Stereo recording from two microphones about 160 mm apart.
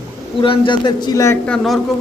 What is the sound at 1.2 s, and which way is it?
Speech, 10° left (ahead or behind).